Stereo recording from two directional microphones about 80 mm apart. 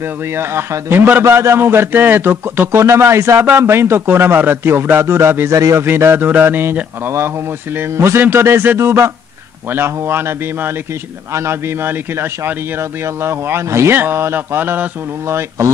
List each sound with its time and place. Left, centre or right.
0.3 s a man's voice: right
5.9 s a man's voice: right